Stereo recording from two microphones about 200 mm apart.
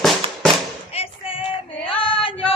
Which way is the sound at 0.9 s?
30° left (ahead or behind).